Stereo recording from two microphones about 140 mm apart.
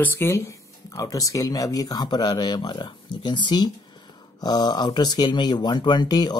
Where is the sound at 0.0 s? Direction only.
15° left (ahead or behind).